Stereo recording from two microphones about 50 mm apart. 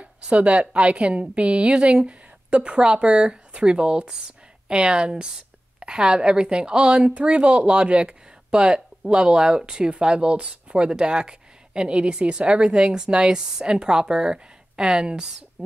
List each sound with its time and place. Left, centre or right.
0.0 s a woman's voice: right